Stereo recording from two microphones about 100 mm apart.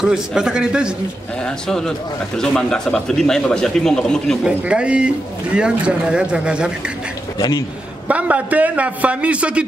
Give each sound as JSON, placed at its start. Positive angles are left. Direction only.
{"t": 0.0, "sound": "speech", "side_deg": -5}
{"t": 1.4, "sound": "speech", "side_deg": 5}
{"t": 4.5, "sound": "speech", "side_deg": -10}
{"t": 7.3, "sound": "a man's voice", "side_deg": 45}
{"t": 8.1, "sound": "speech", "side_deg": -15}